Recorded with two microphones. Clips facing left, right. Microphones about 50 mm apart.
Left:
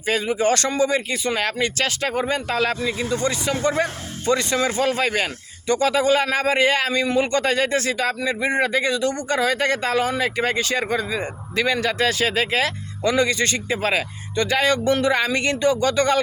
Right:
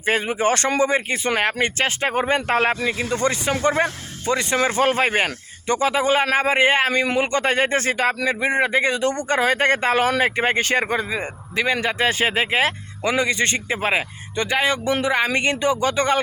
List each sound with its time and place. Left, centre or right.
0.0 s speech: right
8.4 s speech: right